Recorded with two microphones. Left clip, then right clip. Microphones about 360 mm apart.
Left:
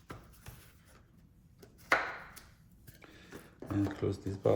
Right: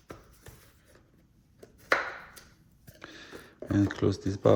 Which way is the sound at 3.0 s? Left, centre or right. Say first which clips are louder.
Right 10 dB; right.